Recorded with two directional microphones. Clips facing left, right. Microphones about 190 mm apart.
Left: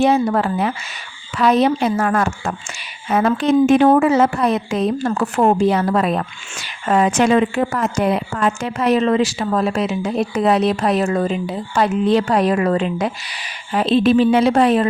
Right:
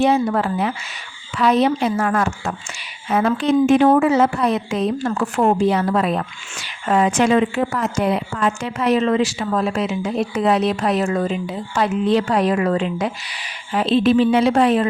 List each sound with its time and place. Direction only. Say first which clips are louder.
0.0 s a woman's voice: left 1 dB; 45° left (ahead or behind)